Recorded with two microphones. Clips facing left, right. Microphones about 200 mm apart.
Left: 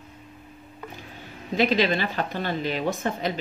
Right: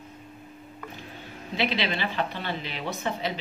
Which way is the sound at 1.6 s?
45° left (ahead or behind).